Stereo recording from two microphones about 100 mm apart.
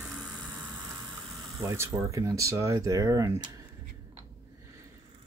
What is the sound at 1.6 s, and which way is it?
Speech, 35° right (ahead or behind).